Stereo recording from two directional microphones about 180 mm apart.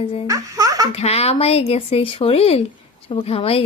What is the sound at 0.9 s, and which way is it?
Speech, 35° left (ahead or behind).